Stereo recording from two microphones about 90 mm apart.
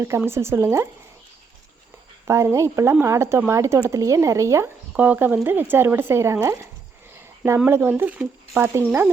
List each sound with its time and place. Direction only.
0.3 s speech: 30° right (ahead or behind)
2.2 s speech: 30° right (ahead or behind)
4.9 s speech: 15° right (ahead or behind)
7.2 s a sound: 30° right (ahead or behind)
7.7 s speech: 25° right (ahead or behind)